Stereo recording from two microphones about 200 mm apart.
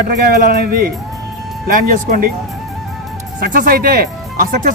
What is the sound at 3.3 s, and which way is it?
Speech, 45° right (ahead or behind).